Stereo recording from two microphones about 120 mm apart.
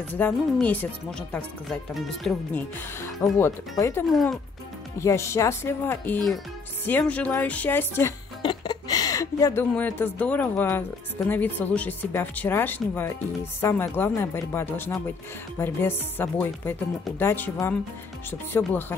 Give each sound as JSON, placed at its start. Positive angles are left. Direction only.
{"t": 0.1, "sound": "speech", "side_deg": 15}
{"t": 2.5, "sound": "speech", "side_deg": 20}
{"t": 4.1, "sound": "speech", "side_deg": 0}
{"t": 4.9, "sound": "speech", "side_deg": 25}
{"t": 8.4, "sound": "a woman's voice", "side_deg": 40}